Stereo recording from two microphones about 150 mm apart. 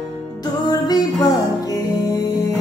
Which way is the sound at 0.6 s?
25° left (ahead or behind).